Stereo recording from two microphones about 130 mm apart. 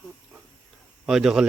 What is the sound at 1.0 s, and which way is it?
Speech, centre (ahead or behind).